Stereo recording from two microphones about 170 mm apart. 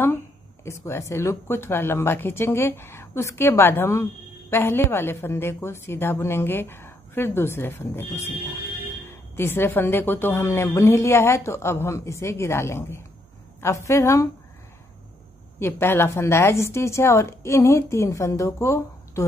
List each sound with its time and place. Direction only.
0.7 s speech: 15° left (ahead or behind)
9.4 s speech: 15° left (ahead or behind)
15.6 s speech: 15° left (ahead or behind)